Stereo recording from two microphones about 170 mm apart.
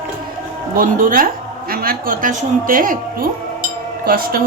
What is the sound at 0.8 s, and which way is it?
A woman's voice, 55° right (ahead or behind).